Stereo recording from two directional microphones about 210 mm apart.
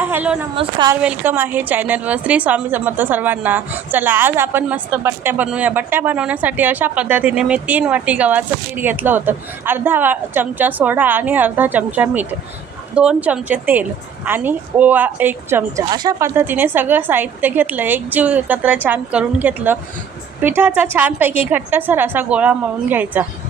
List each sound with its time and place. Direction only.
0.0 s a sound: 10° right (ahead or behind)
0.5 s a woman's voice: 25° right (ahead or behind)
1.0 s a woman's voice: 10° right (ahead or behind)